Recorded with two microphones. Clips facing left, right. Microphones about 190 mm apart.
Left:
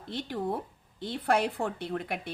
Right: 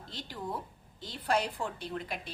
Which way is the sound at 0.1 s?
60° left (ahead or behind).